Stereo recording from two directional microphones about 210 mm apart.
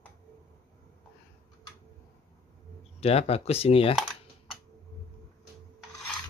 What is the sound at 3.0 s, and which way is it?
Speech, 30° left (ahead or behind).